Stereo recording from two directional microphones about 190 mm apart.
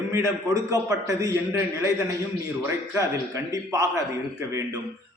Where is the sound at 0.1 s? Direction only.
15° right (ahead or behind).